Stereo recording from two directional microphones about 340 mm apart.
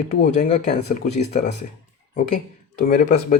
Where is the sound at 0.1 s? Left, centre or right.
Centre.